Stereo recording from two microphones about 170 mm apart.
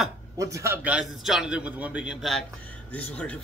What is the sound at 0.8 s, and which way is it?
A man's voice, 5° right (ahead or behind).